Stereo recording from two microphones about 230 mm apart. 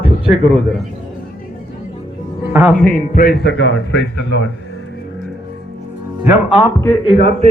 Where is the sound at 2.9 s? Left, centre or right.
Left.